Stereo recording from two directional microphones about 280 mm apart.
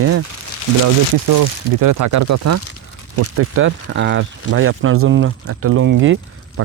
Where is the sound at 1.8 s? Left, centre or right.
Right.